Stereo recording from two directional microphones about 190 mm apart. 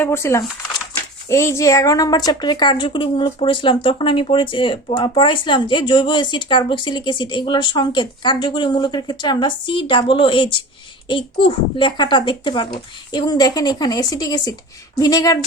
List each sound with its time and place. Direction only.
0.0 s a woman's voice: 15° left (ahead or behind)